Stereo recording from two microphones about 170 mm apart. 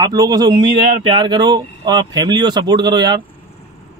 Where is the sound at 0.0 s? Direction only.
20° right (ahead or behind).